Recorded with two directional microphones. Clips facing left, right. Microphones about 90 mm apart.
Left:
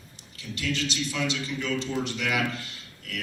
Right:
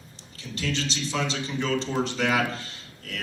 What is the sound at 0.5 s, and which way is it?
A man's voice, 30° right (ahead or behind).